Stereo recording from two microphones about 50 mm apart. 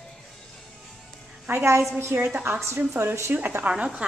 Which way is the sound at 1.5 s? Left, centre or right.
Right.